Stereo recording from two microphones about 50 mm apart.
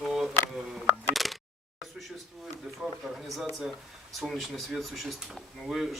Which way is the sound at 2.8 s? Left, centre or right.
Centre.